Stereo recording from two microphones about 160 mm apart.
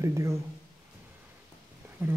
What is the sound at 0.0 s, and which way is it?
Speech, 20° right (ahead or behind).